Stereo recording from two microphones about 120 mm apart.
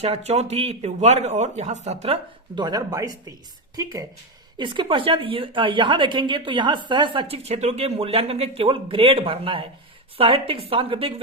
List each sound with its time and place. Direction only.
0.0 s speech: 60° right (ahead or behind)
2.6 s speech: 35° right (ahead or behind)
4.5 s a woman's voice: 40° right (ahead or behind)